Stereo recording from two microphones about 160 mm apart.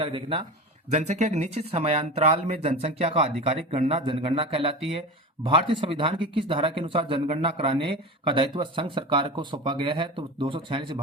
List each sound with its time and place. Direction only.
0.0 s speech: 35° right (ahead or behind)
0.9 s speech: 45° right (ahead or behind); by 11.0 s 30° right (ahead or behind)